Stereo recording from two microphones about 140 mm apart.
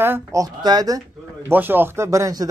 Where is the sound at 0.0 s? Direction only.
20° right (ahead or behind).